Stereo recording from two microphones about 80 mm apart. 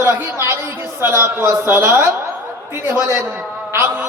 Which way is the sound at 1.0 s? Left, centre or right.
Right.